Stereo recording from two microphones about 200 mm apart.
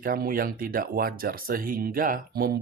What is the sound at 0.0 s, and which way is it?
Speech, 45° right (ahead or behind).